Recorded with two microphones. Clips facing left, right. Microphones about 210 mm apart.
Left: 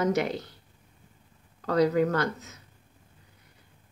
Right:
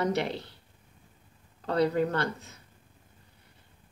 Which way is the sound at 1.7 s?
30° right (ahead or behind).